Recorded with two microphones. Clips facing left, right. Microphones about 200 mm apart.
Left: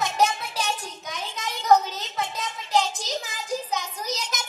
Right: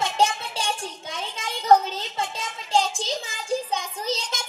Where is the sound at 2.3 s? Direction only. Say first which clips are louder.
Even; 25° right (ahead or behind).